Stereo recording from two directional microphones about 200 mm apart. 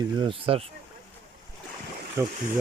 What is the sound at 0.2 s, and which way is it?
Speech, 25° right (ahead or behind).